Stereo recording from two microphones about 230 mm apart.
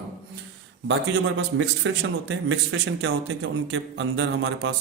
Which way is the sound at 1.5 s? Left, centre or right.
Right.